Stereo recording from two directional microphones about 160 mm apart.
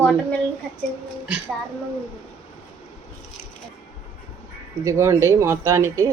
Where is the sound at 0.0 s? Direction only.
5° left (ahead or behind).